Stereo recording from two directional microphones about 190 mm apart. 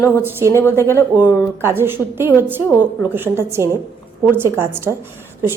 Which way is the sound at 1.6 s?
10° right (ahead or behind).